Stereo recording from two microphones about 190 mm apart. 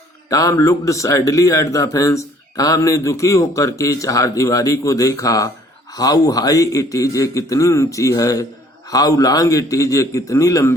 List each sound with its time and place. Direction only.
0.3 s a man's voice: 15° left (ahead or behind)